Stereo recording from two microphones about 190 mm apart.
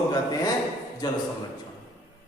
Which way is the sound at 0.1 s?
20° left (ahead or behind).